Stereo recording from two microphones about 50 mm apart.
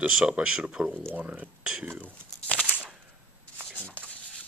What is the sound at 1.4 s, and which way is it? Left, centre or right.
Speech, centre.